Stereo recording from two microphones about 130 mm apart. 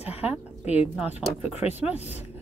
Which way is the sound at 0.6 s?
55° left (ahead or behind).